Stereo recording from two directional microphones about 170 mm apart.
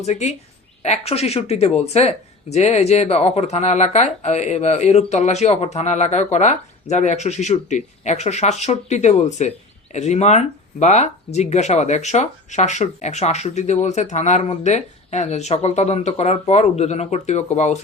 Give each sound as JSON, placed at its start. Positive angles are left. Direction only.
{"t": 0.0, "sound": "speech", "side_deg": 40}